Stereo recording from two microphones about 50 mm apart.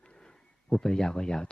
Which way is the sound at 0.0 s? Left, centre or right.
Centre.